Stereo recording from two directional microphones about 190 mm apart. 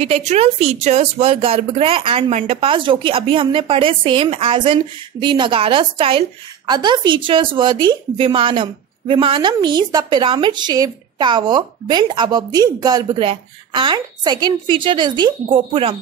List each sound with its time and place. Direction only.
0.0 s a woman's voice: 35° right (ahead or behind)